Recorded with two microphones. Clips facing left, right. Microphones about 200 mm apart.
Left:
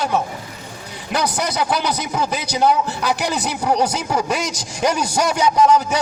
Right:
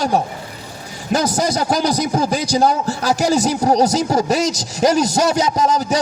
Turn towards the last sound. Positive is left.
turn(degrees=-35)  # may be behind; listen again after turning